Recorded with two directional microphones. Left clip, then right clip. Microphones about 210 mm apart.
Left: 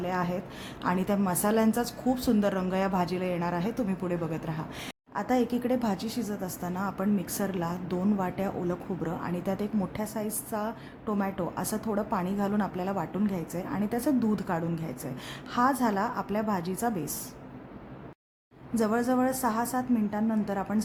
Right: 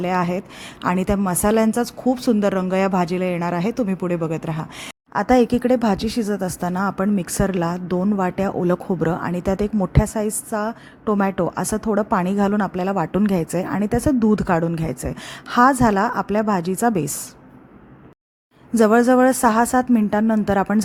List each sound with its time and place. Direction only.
0.0 s speech: 35° right (ahead or behind)
18.7 s speech: 35° right (ahead or behind)